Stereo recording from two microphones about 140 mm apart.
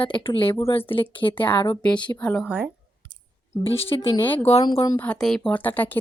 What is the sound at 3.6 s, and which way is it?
Speech, 40° left (ahead or behind).